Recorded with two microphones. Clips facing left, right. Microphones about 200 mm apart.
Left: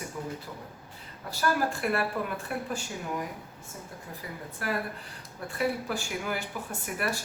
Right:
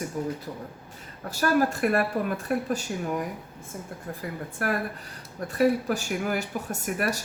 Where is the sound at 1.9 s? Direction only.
40° right (ahead or behind).